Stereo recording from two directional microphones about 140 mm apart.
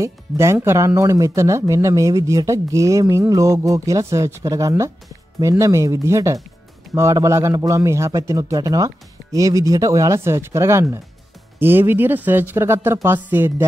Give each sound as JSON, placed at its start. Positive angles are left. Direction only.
{"t": 0.0, "sound": "speech", "side_deg": -20}